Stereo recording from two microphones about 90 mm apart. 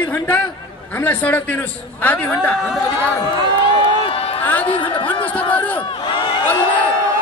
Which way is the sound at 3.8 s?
90° left.